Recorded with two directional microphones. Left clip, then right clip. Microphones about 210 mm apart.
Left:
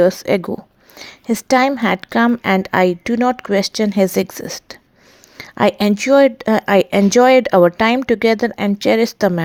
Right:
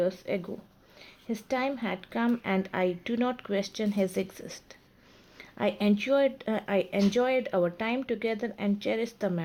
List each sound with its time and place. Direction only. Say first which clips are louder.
0.0 s speech: left 15 dB; 50° left (ahead or behind)